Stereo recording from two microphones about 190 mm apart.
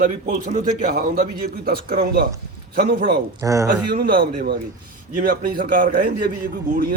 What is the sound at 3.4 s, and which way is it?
Speech, 15° right (ahead or behind).